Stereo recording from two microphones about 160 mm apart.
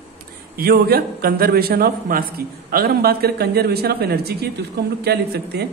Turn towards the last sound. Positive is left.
turn(degrees=-90)